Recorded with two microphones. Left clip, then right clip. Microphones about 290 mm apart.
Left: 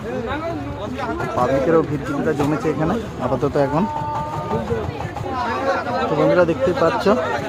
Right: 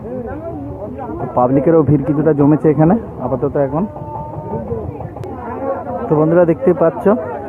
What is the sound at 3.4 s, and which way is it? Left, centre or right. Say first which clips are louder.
Speech: right 2 dB; centre.